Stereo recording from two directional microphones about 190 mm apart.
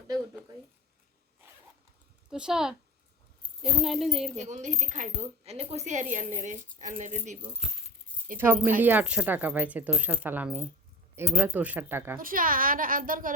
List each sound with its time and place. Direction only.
2.3 s a woman's voice: 5° right (ahead or behind)
4.4 s a woman's voice: 40° right (ahead or behind)
8.4 s speech: 10° right (ahead or behind)
12.2 s a child's voice: 45° right (ahead or behind)